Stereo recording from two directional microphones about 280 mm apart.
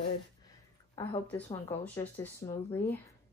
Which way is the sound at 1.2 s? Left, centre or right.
Centre.